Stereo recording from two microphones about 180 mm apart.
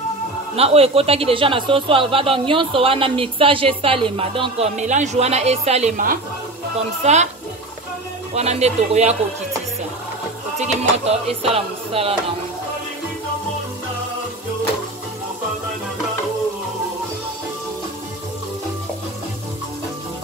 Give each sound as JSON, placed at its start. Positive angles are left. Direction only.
{"t": 0.6, "sound": "a man's voice", "side_deg": -35}
{"t": 8.4, "sound": "a man's voice", "side_deg": -35}
{"t": 10.6, "sound": "a man's voice", "side_deg": -35}